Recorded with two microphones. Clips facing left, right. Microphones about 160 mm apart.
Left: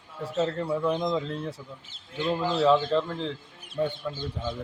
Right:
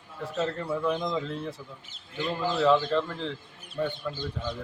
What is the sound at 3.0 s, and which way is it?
Speech, 35° left (ahead or behind).